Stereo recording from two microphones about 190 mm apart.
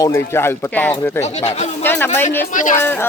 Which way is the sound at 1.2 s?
35° left (ahead or behind).